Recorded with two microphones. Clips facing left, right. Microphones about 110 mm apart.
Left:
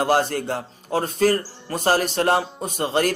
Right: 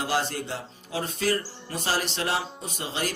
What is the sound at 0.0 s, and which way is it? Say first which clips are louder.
Speech: left 8 dB; 50° left (ahead or behind).